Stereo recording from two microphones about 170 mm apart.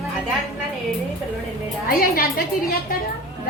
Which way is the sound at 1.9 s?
60° left (ahead or behind).